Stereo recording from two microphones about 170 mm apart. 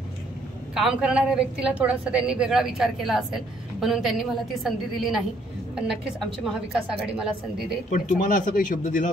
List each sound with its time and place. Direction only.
0.7 s a woman's voice: 5° right (ahead or behind)
7.9 s speech: 50° left (ahead or behind)